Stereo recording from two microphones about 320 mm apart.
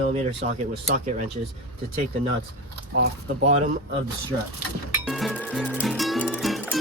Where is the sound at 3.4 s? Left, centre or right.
Right.